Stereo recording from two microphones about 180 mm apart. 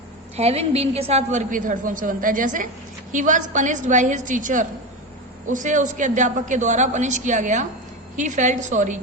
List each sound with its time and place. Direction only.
0.3 s a woman's voice: 35° right (ahead or behind)